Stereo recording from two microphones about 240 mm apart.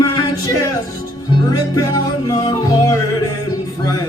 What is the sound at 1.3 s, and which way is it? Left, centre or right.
Speech, centre.